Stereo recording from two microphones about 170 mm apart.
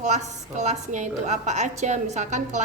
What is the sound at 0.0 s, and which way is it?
A woman's voice, 40° right (ahead or behind).